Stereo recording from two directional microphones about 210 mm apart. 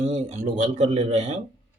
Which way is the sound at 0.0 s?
35° right (ahead or behind).